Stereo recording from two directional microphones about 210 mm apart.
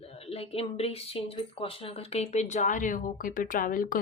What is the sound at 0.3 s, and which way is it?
A woman's voice, 30° left (ahead or behind).